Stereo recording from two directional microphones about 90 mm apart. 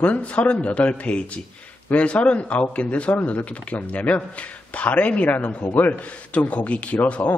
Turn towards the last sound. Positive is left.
turn(degrees=15)  # may be behind; listen again after turning